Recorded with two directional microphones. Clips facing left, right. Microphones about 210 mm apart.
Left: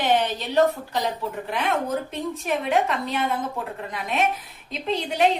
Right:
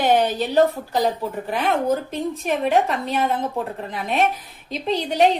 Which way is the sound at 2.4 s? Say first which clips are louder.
Right 3 dB; 40° right (ahead or behind).